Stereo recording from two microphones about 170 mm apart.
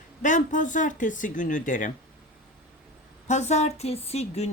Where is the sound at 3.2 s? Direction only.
40° left (ahead or behind).